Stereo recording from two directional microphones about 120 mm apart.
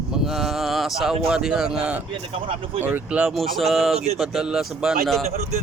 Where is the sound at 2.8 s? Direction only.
10° right (ahead or behind).